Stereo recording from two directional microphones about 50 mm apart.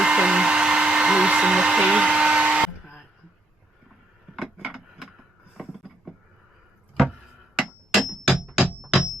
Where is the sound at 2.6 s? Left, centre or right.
Centre.